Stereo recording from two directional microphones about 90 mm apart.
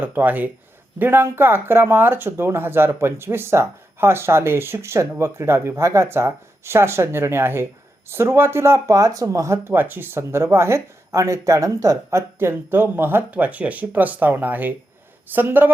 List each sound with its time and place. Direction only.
0.0 s speech: 20° right (ahead or behind); by 12.2 s 40° right (ahead or behind)
12.4 s speech: 25° right (ahead or behind)